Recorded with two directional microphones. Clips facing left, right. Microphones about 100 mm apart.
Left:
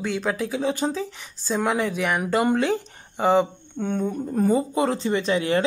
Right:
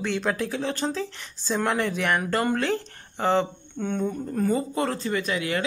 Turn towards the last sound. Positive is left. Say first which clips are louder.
# left 5 dB
turn(degrees=30)  # may be behind; listen again after turning